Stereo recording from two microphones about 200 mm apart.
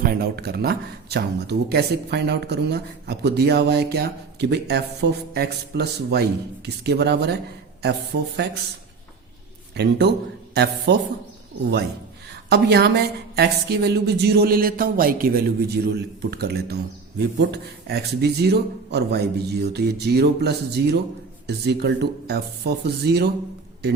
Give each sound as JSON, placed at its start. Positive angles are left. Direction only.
{"t": 0.0, "sound": "a woman's voice", "side_deg": -50}
{"t": 9.7, "sound": "a woman's voice", "side_deg": -55}
{"t": 12.3, "sound": "a woman's voice", "side_deg": -55}